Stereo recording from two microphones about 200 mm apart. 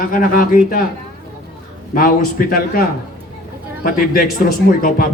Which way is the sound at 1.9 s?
45° left (ahead or behind).